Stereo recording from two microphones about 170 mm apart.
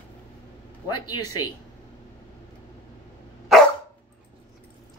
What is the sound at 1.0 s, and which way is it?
Speech, 25° left (ahead or behind).